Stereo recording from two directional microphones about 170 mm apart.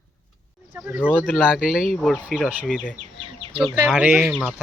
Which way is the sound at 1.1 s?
Centre (ahead or behind).